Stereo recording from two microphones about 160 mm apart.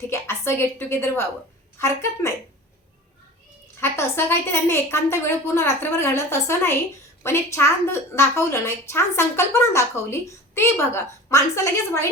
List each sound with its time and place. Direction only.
0.1 s a woman's voice: 15° left (ahead or behind)
3.8 s a woman's voice: 15° left (ahead or behind)